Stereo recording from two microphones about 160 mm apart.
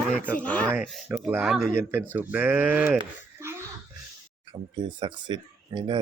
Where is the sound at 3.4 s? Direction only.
15° right (ahead or behind).